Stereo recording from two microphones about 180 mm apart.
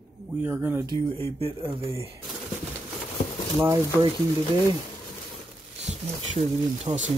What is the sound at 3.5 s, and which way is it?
Speech, 15° right (ahead or behind).